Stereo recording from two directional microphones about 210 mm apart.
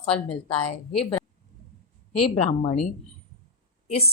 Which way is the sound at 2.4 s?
35° left (ahead or behind).